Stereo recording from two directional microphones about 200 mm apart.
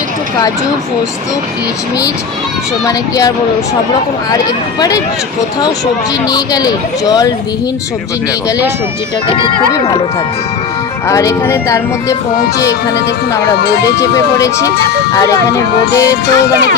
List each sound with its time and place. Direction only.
2.8 s speech: 15° left (ahead or behind)
6.2 s speech: 20° left (ahead or behind)
9.2 s speech: 25° left (ahead or behind)
11.1 s speech: 15° left (ahead or behind)
13.6 s speech: 55° left (ahead or behind)
14.3 s speech: 15° left (ahead or behind)
16.0 s speech: 15° left (ahead or behind)